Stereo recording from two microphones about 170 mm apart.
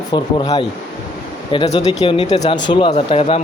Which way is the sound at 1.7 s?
30° left (ahead or behind).